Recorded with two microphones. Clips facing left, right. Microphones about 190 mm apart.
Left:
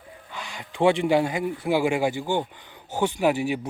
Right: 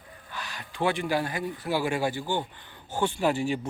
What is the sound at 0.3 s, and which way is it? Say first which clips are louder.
Speech: left 2 dB; 20° left (ahead or behind).